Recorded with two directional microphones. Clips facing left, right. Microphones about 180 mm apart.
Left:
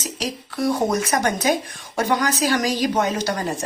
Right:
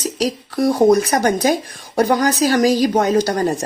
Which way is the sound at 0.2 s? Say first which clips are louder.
Right 6 dB; 40° right (ahead or behind).